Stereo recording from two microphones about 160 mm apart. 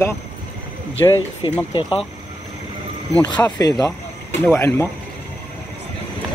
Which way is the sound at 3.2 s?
25° left (ahead or behind).